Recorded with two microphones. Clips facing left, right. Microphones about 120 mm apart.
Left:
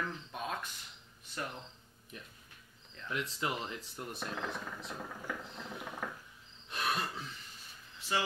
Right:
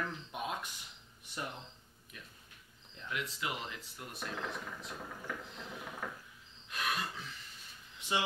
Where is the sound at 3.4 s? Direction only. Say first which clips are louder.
Left 3 dB; 35° left (ahead or behind).